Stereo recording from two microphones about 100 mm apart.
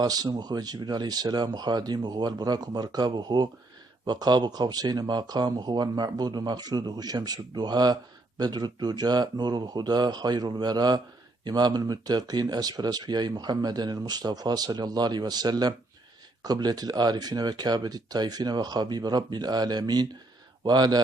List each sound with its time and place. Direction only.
0.0 s speech: 40° right (ahead or behind)